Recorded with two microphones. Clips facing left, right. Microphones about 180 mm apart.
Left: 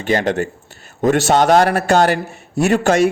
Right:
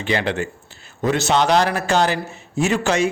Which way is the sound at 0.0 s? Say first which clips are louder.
Left 4 dB; 45° left (ahead or behind).